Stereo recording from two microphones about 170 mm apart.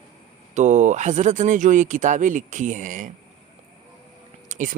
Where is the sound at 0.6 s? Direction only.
45° right (ahead or behind).